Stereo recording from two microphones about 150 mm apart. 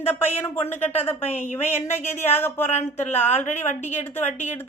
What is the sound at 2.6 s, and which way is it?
Speech, 45° left (ahead or behind).